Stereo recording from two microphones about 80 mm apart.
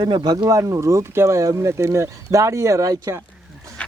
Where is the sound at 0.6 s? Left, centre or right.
Right.